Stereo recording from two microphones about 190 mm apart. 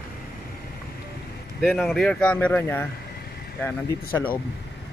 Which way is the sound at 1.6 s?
Centre (ahead or behind).